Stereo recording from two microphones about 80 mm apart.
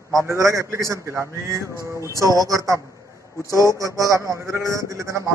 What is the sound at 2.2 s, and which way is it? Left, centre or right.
Speech, right.